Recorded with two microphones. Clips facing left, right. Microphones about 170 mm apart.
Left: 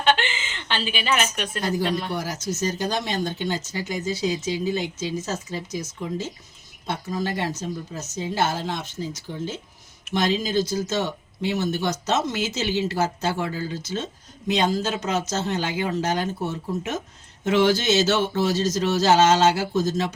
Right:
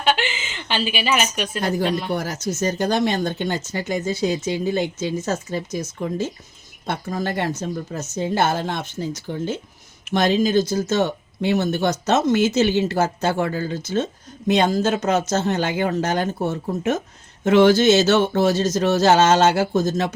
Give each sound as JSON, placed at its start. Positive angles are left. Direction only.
{"t": 0.0, "sound": "speech", "side_deg": -10}
{"t": 2.1, "sound": "speech", "side_deg": -55}